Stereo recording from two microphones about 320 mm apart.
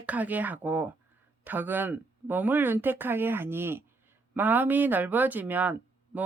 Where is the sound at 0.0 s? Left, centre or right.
Centre.